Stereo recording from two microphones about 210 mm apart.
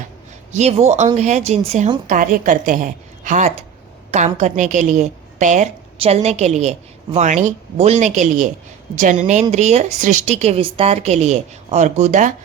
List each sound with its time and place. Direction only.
0.5 s a woman's voice: 30° right (ahead or behind)